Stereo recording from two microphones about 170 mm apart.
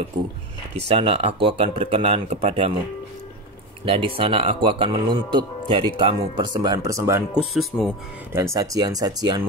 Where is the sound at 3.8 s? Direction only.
35° right (ahead or behind); by 7.2 s 15° right (ahead or behind).